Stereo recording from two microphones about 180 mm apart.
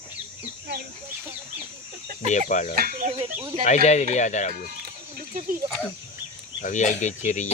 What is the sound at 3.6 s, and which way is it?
Speech, 40° left (ahead or behind).